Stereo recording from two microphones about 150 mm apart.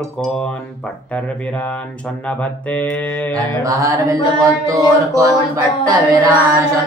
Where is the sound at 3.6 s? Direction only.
20° right (ahead or behind).